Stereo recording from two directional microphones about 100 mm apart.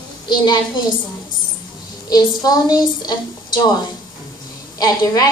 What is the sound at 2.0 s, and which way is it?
A woman's voice, 40° left (ahead or behind).